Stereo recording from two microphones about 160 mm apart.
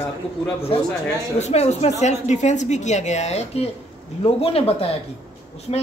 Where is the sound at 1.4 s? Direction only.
45° left (ahead or behind).